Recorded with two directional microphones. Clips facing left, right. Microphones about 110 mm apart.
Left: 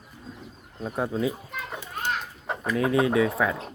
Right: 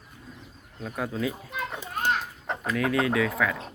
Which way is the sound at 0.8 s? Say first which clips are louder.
Left 3 dB; 25° left (ahead or behind).